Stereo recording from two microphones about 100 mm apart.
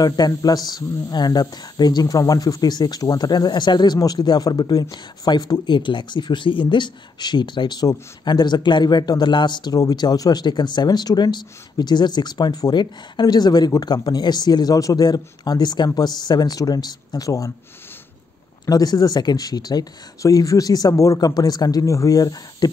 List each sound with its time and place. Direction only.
0.0 s speech: 40° left (ahead or behind)
18.7 s speech: 40° left (ahead or behind)